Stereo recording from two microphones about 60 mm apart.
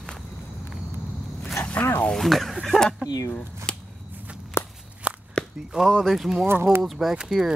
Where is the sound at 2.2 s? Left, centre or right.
Centre.